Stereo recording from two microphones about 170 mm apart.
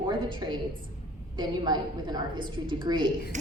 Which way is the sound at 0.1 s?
30° right (ahead or behind).